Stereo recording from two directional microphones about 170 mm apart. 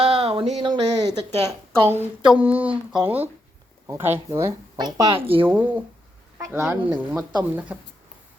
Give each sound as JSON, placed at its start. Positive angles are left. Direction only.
{"t": 0.2, "sound": "a sound", "side_deg": -30}
{"t": 0.6, "sound": "a woman's voice", "side_deg": -25}
{"t": 1.8, "sound": "speech", "side_deg": -10}
{"t": 5.5, "sound": "speech", "side_deg": -10}